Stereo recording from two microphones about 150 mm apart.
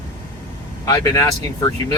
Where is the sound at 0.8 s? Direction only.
20° left (ahead or behind).